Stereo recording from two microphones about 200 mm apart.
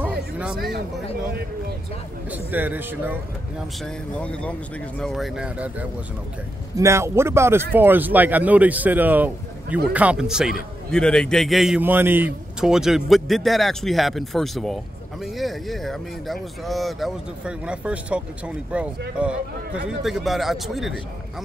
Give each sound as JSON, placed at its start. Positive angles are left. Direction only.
{"t": 0.0, "sound": "music", "side_deg": -5}
{"t": 0.6, "sound": "speech", "side_deg": -50}
{"t": 2.3, "sound": "speech", "side_deg": -10}
{"t": 3.8, "sound": "a man's voice", "side_deg": 5}